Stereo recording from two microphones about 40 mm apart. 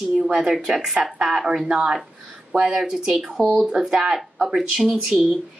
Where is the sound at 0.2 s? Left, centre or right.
Centre.